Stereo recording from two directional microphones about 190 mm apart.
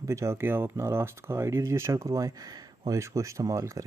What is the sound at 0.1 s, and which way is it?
Speech, 15° right (ahead or behind).